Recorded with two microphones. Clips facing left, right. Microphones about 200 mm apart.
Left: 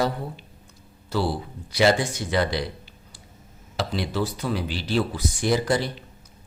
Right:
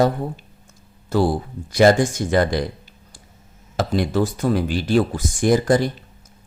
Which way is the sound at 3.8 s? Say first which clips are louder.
Right 6 dB; 50° right (ahead or behind).